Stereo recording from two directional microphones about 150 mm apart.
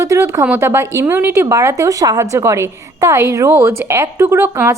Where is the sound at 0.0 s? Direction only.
20° right (ahead or behind).